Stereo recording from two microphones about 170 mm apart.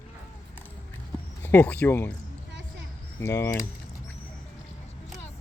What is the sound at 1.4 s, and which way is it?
Speech, 10° left (ahead or behind).